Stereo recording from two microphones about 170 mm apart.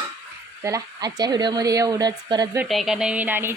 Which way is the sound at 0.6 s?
20° right (ahead or behind).